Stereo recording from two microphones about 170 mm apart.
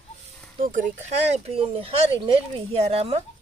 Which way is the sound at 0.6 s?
50° right (ahead or behind).